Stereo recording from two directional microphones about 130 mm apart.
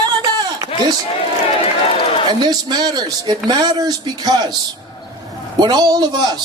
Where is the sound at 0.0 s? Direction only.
35° right (ahead or behind).